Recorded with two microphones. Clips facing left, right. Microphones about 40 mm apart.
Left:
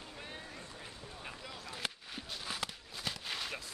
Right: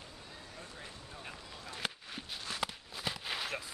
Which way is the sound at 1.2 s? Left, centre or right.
Centre.